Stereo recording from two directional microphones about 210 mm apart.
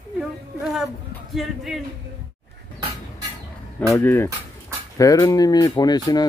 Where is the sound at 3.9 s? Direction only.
10° left (ahead or behind).